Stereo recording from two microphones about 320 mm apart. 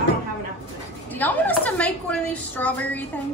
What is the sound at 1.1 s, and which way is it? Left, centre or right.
A woman's voice, centre.